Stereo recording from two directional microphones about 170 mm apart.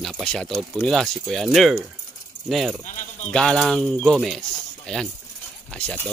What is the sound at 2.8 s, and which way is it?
Speech, 45° left (ahead or behind).